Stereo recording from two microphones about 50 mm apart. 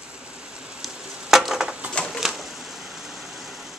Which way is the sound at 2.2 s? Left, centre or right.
Centre.